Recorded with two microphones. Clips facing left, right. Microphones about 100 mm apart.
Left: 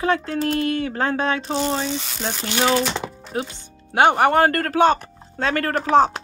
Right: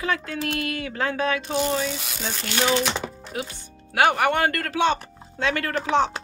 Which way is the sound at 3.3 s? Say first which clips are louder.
Left 4 dB; 25° left (ahead or behind).